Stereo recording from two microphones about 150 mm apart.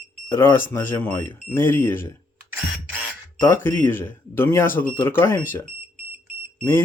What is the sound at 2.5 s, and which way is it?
Camera, 10° right (ahead or behind).